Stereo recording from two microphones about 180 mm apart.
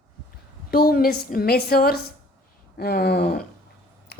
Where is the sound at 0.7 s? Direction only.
55° left (ahead or behind).